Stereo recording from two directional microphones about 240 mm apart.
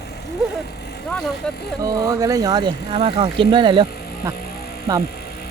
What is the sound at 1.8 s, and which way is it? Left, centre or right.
Speech, centre.